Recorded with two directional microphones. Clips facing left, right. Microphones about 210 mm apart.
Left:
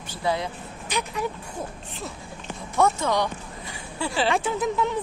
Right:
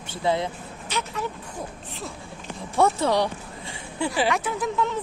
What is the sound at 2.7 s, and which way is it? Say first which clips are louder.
Speech: right 1 dB; 30° right (ahead or behind).